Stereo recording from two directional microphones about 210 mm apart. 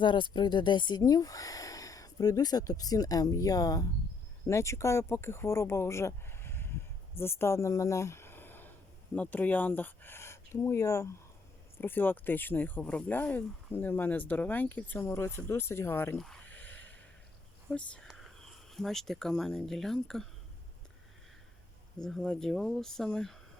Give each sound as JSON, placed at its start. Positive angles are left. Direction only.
{"t": 0.0, "sound": "speech", "side_deg": 20}
{"t": 21.9, "sound": "speech", "side_deg": 5}